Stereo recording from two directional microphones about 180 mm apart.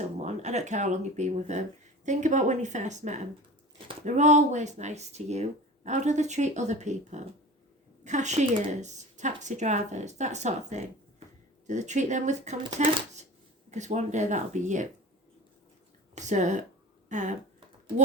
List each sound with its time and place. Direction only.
0.0 s speech: 40° right (ahead or behind)
16.1 s speech: 40° right (ahead or behind)